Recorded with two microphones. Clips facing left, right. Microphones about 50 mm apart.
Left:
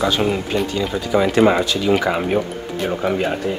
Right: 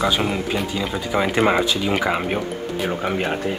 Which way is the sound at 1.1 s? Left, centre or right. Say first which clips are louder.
Left 4 dB; centre.